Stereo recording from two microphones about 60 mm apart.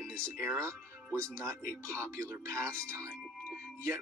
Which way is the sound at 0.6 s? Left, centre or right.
Right.